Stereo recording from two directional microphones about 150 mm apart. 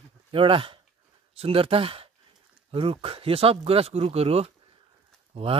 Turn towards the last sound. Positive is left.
turn(degrees=-40)  # may be behind; listen again after turning